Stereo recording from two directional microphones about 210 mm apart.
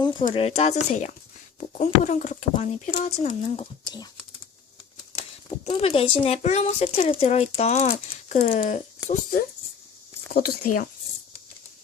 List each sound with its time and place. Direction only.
0.0 s a sound: 20° left (ahead or behind)
0.3 s speech: 30° left (ahead or behind)
5.6 s speech: 25° left (ahead or behind)
10.3 s speech: 45° left (ahead or behind)